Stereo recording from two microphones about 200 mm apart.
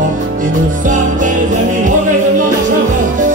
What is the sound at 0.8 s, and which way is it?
Music, 40° right (ahead or behind).